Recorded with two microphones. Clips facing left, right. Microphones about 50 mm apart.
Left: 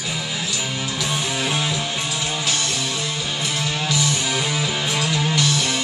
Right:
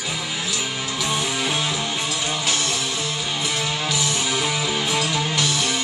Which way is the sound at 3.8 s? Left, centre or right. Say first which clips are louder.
Left 1 dB; centre.